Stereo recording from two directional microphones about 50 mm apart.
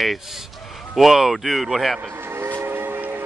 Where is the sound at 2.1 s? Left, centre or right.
Right.